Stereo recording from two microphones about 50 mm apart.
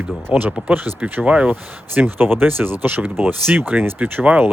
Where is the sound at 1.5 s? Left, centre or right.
Right.